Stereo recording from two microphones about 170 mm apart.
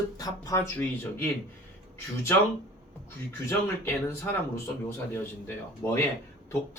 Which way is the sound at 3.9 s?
15° left (ahead or behind).